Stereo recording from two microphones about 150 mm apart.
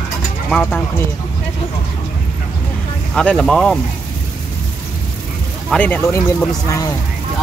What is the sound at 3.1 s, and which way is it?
Speech, 5° left (ahead or behind).